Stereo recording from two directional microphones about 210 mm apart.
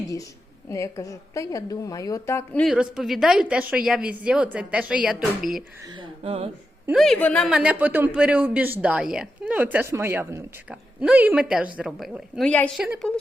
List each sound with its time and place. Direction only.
0.7 s a woman's voice: 15° left (ahead or behind); by 5.6 s centre (ahead or behind)
5.8 s speech: 20° right (ahead or behind)
6.8 s speech: centre (ahead or behind)